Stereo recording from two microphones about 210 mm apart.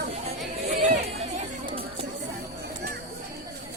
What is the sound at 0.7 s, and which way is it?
Chatter, 30° right (ahead or behind).